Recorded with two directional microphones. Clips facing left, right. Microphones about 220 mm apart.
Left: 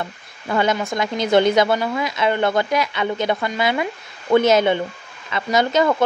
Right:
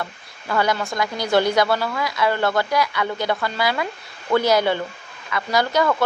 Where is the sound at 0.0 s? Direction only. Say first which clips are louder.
Left 2 dB; 20° left (ahead or behind).